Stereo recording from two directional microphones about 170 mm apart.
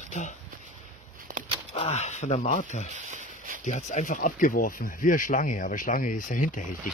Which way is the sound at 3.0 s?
45° right (ahead or behind).